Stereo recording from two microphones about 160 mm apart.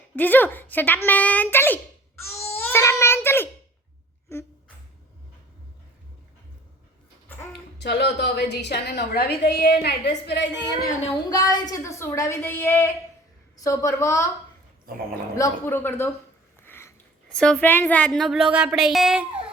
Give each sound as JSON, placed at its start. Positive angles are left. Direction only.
{"t": 0.2, "sound": "speech", "side_deg": 10}
{"t": 2.5, "sound": "crying", "side_deg": 10}
{"t": 4.3, "sound": "speech", "side_deg": 15}
{"t": 7.8, "sound": "a woman's voice", "side_deg": 90}
{"t": 11.3, "sound": "a woman's voice", "side_deg": 25}
{"t": 15.4, "sound": "a woman's voice", "side_deg": 15}